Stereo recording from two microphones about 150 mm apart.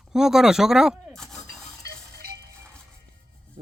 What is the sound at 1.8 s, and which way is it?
Music, 90° right.